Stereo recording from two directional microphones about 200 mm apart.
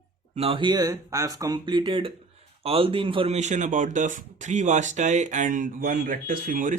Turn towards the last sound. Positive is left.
turn(degrees=-40)  # may be behind; listen again after turning